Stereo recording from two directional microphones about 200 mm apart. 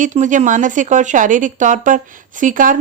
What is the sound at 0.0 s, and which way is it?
A woman's voice, 40° right (ahead or behind).